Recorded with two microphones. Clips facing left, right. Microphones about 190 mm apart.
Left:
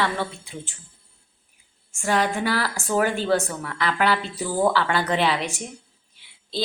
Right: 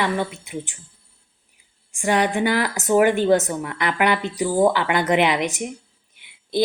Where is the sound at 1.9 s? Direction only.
15° right (ahead or behind).